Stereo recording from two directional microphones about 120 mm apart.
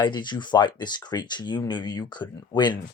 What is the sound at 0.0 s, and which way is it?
Speech, 40° left (ahead or behind).